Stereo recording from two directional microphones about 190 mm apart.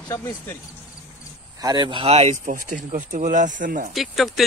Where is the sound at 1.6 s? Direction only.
20° right (ahead or behind); by 3.8 s 45° right (ahead or behind).